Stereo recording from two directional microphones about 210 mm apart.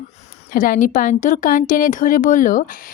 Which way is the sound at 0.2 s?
35° left (ahead or behind).